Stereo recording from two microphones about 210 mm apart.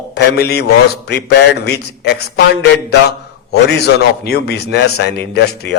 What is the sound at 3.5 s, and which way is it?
A man's voice, 50° left (ahead or behind).